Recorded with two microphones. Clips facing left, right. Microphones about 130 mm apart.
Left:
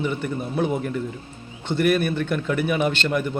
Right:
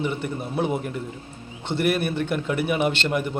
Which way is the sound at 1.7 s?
30° right (ahead or behind).